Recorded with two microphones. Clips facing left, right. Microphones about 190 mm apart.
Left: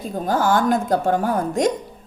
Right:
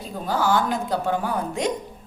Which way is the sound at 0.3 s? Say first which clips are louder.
Left 4 dB; 50° left (ahead or behind).